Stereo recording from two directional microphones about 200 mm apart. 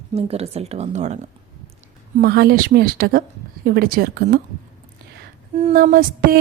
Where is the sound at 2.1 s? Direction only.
50° right (ahead or behind).